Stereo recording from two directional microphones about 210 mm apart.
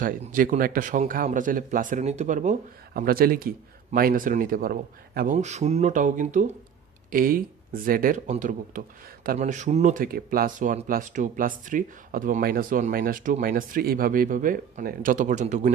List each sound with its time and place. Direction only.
0.0 s speech: 40° right (ahead or behind)